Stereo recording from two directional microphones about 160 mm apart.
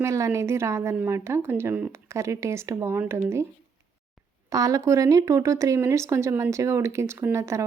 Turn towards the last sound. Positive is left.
turn(degrees=-15)  # may be behind; listen again after turning